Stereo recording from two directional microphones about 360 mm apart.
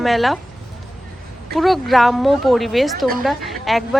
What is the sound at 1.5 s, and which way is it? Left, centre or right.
A woman's voice, centre.